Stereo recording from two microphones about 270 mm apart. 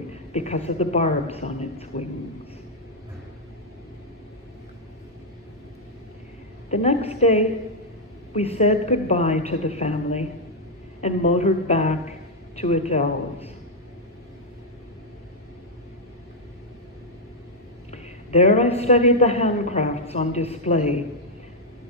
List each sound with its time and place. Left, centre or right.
0.1 s a woman's voice: left
6.7 s a woman's voice: left
17.9 s a woman's voice: left